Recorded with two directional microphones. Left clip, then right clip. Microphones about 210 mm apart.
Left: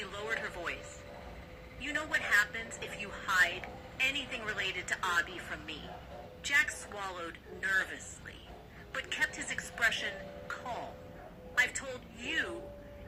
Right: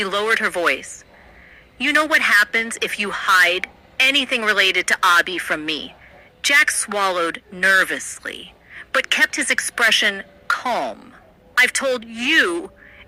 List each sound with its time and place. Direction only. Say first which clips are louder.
0.0 s a woman's voice: right 18 dB; 55° right (ahead or behind)
1.8 s a woman's voice: right 18 dB; 55° right (ahead or behind)